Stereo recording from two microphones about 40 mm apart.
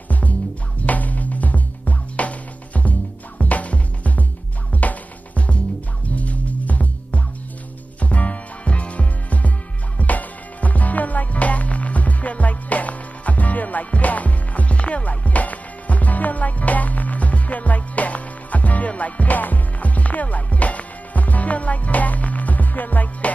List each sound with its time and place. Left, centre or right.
0.8 s music: left